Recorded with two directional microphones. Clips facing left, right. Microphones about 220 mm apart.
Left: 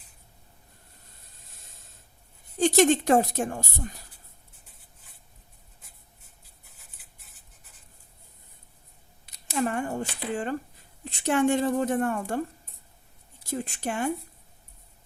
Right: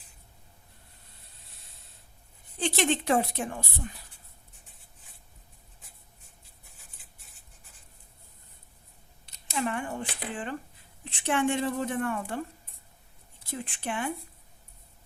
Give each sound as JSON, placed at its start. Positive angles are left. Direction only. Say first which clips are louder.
{"t": 2.6, "sound": "a woman's voice", "louder": "left 7 dB", "side_deg": 45}
{"t": 9.5, "sound": "a sound", "louder": "left 4 dB", "side_deg": 40}
{"t": 11.0, "sound": "a woman's voice", "louder": "left 4 dB", "side_deg": 40}
{"t": 13.4, "sound": "a woman's voice", "louder": "left 5 dB", "side_deg": 40}